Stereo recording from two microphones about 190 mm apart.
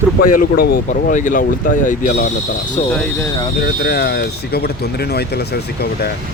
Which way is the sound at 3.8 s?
60° left (ahead or behind).